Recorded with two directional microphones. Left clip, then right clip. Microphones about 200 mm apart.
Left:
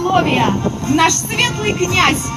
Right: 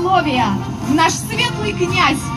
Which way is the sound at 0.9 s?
10° left (ahead or behind).